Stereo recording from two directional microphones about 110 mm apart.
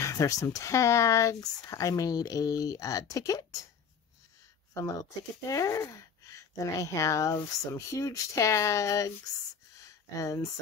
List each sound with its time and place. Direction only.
0.0 s speech: 30° left (ahead or behind)
4.7 s speech: 30° left (ahead or behind)
9.8 s a sound: 30° left (ahead or behind)